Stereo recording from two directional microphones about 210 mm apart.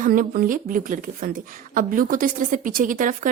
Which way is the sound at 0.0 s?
40° right (ahead or behind).